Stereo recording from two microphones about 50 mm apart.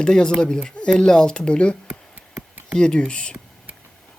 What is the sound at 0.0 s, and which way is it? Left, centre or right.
Speech, centre.